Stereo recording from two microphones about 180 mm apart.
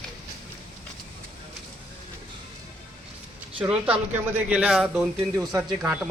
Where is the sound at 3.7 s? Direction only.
5° right (ahead or behind).